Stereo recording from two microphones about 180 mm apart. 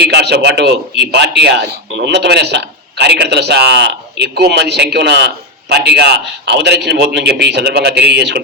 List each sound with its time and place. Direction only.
0.0 s a man's voice: 70° right (ahead or behind)